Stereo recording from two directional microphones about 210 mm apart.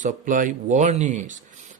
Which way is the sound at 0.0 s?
40° right (ahead or behind).